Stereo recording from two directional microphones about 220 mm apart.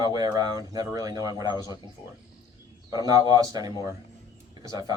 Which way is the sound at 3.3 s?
15° right (ahead or behind).